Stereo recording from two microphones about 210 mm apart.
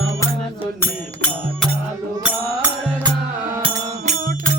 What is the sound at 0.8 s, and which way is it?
Music, 5° left (ahead or behind).